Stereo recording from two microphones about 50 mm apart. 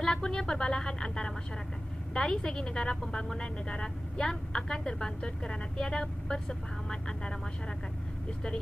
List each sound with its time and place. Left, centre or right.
0.0 s a woman's voice: centre